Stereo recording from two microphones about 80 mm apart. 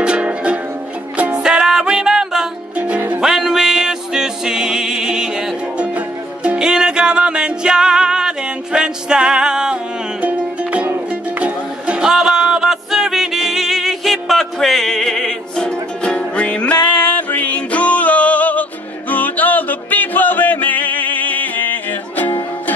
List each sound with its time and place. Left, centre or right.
0.0 s music: centre; by 22.3 s left